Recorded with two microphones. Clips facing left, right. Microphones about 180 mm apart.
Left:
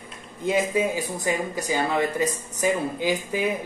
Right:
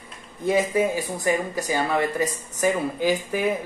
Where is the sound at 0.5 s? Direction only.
20° left (ahead or behind).